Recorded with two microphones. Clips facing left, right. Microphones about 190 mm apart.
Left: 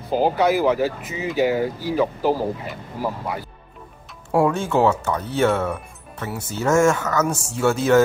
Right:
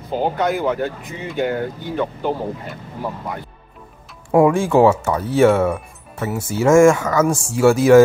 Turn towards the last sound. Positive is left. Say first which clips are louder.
# right 6 dB
turn(degrees=-10)  # may be behind; listen again after turning